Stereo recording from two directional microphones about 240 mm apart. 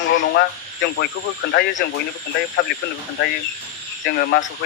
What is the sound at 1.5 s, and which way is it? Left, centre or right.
Speech, left.